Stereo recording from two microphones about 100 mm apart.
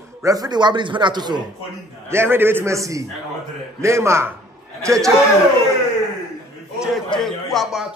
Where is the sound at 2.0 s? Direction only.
25° right (ahead or behind).